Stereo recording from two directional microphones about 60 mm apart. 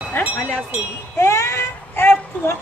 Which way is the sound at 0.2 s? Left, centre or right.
Left.